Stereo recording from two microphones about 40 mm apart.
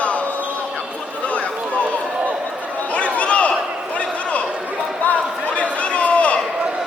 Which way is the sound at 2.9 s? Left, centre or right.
Left.